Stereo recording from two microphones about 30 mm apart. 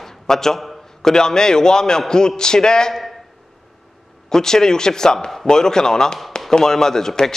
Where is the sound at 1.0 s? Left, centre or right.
Left.